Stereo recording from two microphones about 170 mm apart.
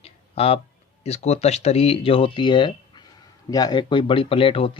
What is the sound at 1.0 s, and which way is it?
Speech, 40° left (ahead or behind).